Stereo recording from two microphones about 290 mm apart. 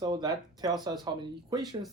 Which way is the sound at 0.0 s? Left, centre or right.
Centre.